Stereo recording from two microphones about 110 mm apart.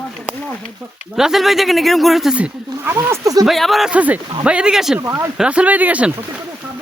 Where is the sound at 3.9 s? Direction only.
10° right (ahead or behind).